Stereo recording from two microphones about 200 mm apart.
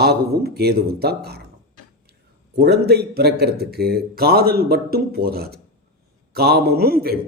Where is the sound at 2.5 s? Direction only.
55° right (ahead or behind).